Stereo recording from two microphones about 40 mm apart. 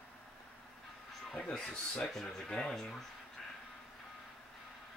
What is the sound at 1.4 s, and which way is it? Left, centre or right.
Speech, centre.